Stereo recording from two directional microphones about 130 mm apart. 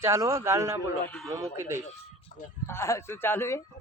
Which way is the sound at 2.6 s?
20° left (ahead or behind).